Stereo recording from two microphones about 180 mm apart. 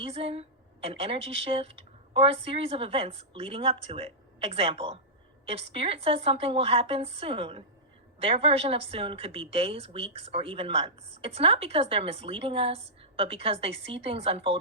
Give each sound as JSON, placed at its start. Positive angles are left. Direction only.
{"t": 0.0, "sound": "a woman's voice", "side_deg": -30}